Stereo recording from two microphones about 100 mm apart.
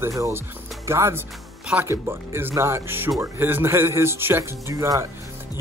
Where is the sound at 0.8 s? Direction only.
25° right (ahead or behind).